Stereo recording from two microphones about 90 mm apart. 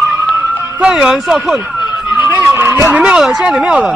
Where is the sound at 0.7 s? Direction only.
5° right (ahead or behind).